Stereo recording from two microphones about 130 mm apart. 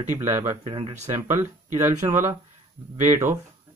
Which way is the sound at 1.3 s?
20° right (ahead or behind).